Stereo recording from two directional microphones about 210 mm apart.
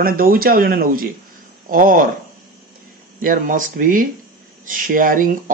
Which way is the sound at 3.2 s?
40° right (ahead or behind).